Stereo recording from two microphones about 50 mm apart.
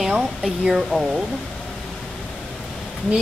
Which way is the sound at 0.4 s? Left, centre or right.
Centre.